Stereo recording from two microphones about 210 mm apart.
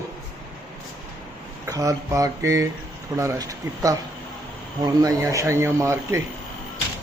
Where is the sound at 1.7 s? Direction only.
15° right (ahead or behind).